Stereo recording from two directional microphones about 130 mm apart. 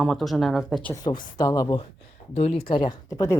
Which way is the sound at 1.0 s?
40° left (ahead or behind).